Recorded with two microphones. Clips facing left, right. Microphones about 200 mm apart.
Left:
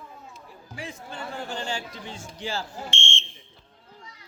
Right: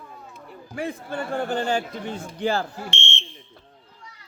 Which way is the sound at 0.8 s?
55° right (ahead or behind).